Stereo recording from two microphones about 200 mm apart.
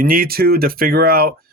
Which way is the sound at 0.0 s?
50° right (ahead or behind).